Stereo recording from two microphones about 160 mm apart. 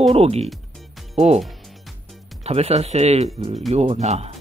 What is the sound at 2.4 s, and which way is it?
Speech, 40° right (ahead or behind).